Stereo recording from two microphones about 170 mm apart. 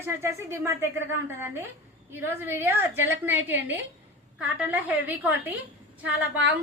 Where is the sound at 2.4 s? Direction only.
15° right (ahead or behind).